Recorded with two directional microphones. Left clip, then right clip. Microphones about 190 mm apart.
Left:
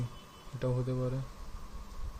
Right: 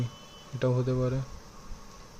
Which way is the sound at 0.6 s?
25° right (ahead or behind).